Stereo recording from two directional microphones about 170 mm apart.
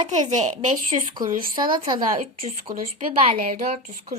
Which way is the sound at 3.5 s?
35° right (ahead or behind).